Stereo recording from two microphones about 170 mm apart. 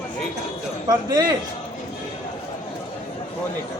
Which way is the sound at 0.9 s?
20° right (ahead or behind).